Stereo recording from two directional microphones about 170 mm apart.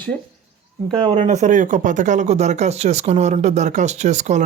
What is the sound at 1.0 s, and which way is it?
Speech, 40° right (ahead or behind).